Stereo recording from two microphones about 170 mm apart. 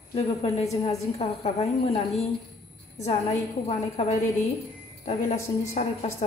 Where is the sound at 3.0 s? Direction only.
40° left (ahead or behind).